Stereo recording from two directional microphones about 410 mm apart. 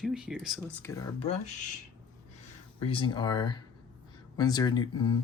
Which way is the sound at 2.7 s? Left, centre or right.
Centre.